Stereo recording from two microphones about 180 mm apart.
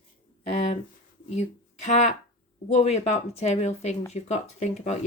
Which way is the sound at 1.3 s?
40° left (ahead or behind).